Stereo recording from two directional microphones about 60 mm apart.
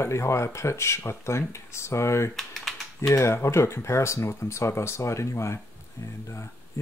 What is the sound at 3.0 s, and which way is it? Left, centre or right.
Speech, left.